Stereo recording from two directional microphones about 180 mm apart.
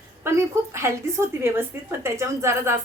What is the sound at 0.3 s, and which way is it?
Speech, 15° right (ahead or behind).